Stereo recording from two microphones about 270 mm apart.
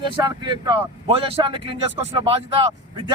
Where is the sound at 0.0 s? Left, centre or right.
Centre.